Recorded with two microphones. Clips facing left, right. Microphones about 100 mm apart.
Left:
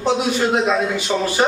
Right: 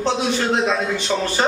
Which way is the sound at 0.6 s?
10° left (ahead or behind).